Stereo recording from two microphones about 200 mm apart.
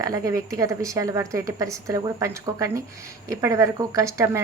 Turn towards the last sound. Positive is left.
turn(degrees=-15)  # may be behind; listen again after turning